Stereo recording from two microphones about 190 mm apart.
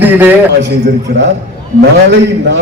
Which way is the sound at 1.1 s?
55° right (ahead or behind).